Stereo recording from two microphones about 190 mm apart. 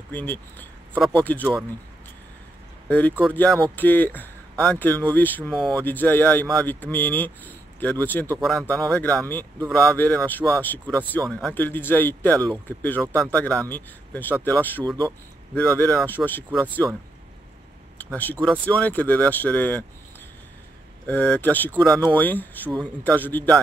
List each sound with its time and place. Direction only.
0.1 s speech: 10° left (ahead or behind)
2.9 s speech: 10° left (ahead or behind)
14.9 s speech: 20° right (ahead or behind)
15.5 s speech: 10° left (ahead or behind)
17.9 s speech: 10° left (ahead or behind)
21.1 s speech: 10° left (ahead or behind)